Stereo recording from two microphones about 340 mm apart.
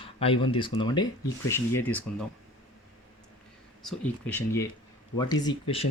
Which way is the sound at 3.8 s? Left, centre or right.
Centre.